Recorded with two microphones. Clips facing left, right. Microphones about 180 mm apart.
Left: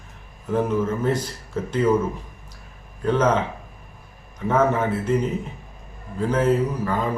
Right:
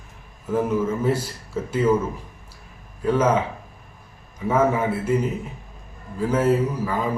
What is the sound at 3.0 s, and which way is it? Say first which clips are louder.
Speech: even; 10° right (ahead or behind).